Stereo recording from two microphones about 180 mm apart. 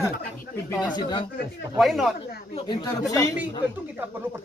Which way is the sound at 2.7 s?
25° left (ahead or behind).